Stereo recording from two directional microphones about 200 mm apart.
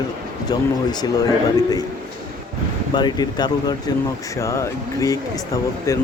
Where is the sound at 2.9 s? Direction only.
20° left (ahead or behind).